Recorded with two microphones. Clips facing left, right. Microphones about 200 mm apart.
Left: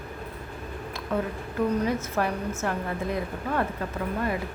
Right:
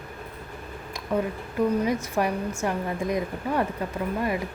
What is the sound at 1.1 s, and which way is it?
A woman's voice, 15° right (ahead or behind).